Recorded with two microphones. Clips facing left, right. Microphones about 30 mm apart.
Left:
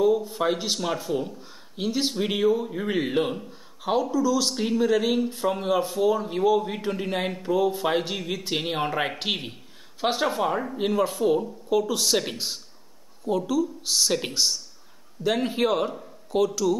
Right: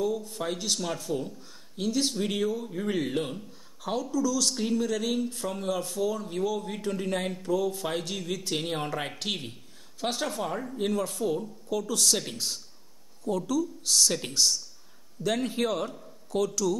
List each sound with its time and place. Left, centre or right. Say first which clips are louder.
0.0 s a man's voice: left 8 dB; left